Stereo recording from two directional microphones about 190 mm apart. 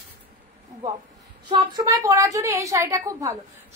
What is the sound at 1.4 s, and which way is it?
Speech, 25° right (ahead or behind).